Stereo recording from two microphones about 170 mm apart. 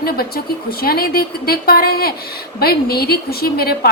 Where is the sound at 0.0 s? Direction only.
65° left (ahead or behind).